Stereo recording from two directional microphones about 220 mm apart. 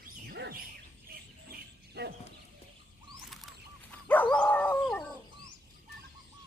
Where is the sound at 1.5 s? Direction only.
50° right (ahead or behind).